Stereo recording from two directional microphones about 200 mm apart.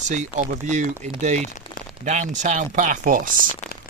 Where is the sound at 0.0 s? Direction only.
35° right (ahead or behind).